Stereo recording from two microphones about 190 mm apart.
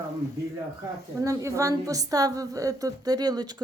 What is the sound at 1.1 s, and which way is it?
A woman's voice, 15° right (ahead or behind).